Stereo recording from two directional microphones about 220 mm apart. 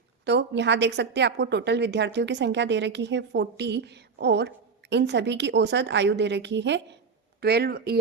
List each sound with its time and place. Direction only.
0.3 s a woman's voice: 50° right (ahead or behind)